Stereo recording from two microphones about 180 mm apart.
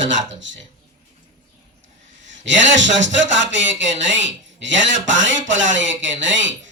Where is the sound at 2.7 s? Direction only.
90° right.